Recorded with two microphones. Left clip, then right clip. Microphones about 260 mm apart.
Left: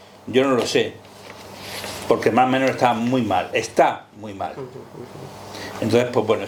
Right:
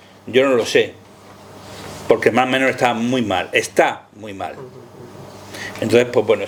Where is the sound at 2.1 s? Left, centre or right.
Right.